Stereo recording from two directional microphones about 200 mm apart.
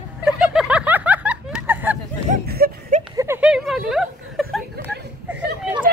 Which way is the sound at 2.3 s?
50° right (ahead or behind).